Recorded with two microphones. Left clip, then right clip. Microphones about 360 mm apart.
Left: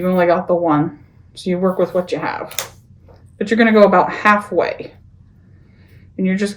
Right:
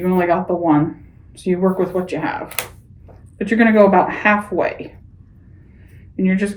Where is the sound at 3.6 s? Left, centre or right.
Left.